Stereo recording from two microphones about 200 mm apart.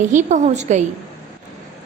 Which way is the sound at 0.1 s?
35° right (ahead or behind).